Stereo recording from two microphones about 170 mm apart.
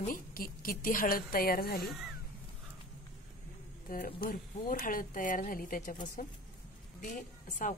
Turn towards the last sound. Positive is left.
turn(degrees=50)  # may be behind; listen again after turning